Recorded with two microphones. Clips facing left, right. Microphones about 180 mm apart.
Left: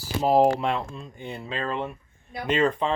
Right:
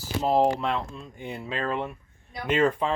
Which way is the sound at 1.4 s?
10° right (ahead or behind).